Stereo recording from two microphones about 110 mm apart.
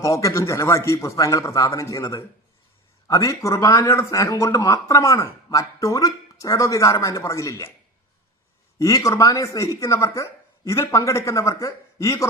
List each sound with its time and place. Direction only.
0.0 s speech: 30° left (ahead or behind)
8.8 s speech: 30° left (ahead or behind)